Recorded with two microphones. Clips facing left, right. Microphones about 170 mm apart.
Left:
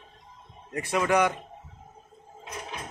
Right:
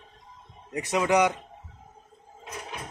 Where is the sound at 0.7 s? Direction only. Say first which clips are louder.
Right 1 dB; 15° right (ahead or behind).